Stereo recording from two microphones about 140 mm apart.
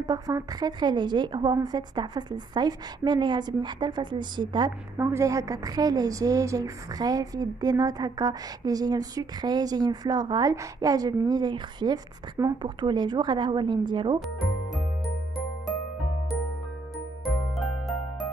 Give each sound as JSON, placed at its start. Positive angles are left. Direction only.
{"t": 0.0, "sound": "a woman's voice", "side_deg": -25}
{"t": 14.2, "sound": "speech", "side_deg": 0}
{"t": 17.2, "sound": "music", "side_deg": 0}